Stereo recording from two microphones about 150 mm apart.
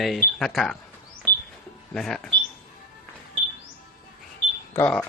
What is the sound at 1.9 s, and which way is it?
Speech, 5° left (ahead or behind).